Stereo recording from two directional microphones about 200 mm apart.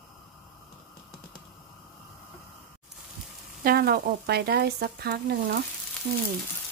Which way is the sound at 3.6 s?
50° right (ahead or behind).